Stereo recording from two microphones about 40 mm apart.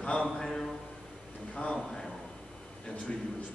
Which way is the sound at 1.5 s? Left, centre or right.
Left.